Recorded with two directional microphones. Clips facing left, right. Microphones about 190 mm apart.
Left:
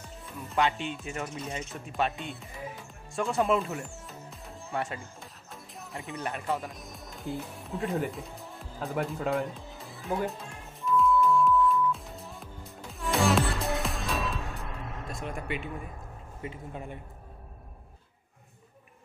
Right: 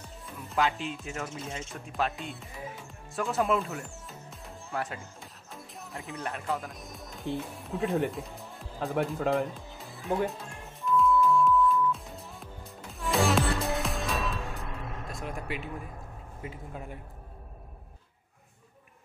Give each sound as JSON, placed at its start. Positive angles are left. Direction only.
{"t": 0.5, "sound": "music", "side_deg": 0}
{"t": 16.4, "sound": "speech", "side_deg": -5}